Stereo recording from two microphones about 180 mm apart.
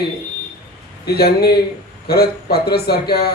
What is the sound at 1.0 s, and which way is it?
Speech, 60° left (ahead or behind).